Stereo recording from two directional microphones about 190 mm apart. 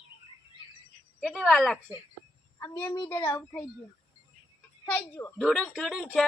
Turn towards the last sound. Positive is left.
turn(degrees=0)  # may be behind; listen again after turning